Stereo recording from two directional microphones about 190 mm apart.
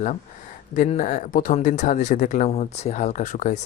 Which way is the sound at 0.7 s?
40° left (ahead or behind).